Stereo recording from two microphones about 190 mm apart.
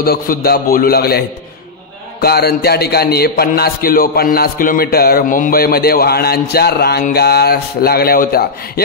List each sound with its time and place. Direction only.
0.0 s a man's voice: 55° left (ahead or behind)